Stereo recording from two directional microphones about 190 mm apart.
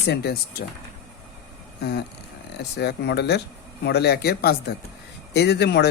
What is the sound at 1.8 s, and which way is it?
Speech, 55° left (ahead or behind).